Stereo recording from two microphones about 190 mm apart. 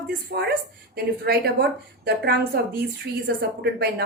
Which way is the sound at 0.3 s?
55° right (ahead or behind).